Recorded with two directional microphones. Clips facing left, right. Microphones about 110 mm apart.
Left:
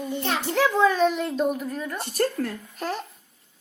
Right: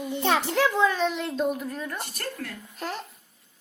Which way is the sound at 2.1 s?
35° left (ahead or behind).